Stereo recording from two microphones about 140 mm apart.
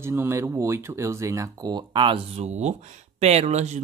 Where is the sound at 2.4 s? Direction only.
55° right (ahead or behind).